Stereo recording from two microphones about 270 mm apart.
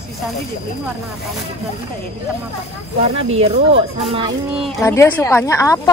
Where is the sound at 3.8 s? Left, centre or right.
Right.